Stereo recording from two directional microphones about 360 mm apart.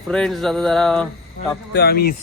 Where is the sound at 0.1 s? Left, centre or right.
Centre.